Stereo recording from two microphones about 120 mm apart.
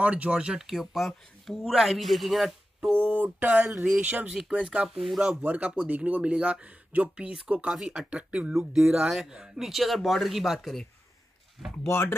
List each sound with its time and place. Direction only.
0.0 s speech: 10° right (ahead or behind)
3.0 s speech: 15° right (ahead or behind); by 10.9 s centre (ahead or behind)
11.8 s speech: 20° left (ahead or behind)